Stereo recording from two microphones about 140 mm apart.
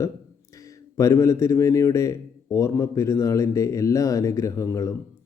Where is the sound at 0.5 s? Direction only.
20° left (ahead or behind).